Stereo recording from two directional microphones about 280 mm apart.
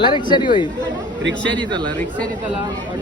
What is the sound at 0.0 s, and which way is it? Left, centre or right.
Speech, centre.